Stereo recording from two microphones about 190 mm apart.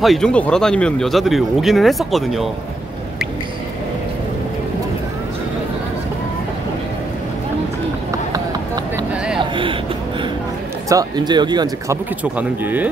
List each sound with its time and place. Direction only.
0.0 s speech: centre (ahead or behind)
8.1 s run: 20° right (ahead or behind)
9.1 s a sound: 5° right (ahead or behind)
9.4 s a sound: 25° right (ahead or behind)
10.9 s speech: 20° right (ahead or behind)
12.2 s speech: 10° right (ahead or behind)